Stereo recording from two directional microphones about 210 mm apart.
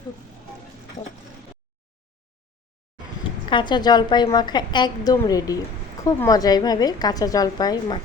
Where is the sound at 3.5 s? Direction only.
20° left (ahead or behind).